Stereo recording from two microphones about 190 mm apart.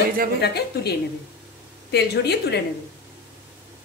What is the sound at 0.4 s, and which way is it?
A woman's voice, 60° left (ahead or behind).